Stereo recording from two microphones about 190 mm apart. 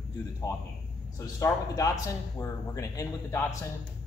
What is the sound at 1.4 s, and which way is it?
Speech, 20° left (ahead or behind).